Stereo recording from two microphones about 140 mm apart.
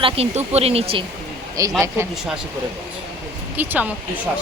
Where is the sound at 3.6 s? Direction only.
10° right (ahead or behind).